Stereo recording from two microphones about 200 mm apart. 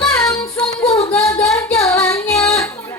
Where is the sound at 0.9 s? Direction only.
15° left (ahead or behind).